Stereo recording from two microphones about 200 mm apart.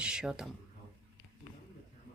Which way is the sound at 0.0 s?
5° right (ahead or behind).